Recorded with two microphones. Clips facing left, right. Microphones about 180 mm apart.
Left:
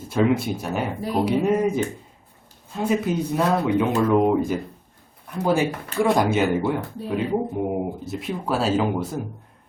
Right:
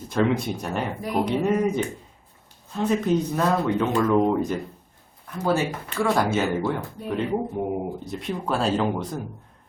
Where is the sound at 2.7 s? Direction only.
10° left (ahead or behind).